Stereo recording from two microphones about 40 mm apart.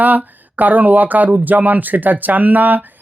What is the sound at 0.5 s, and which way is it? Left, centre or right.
Speech, right.